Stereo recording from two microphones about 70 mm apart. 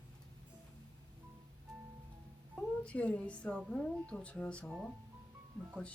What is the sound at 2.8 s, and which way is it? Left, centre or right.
A woman's voice, centre.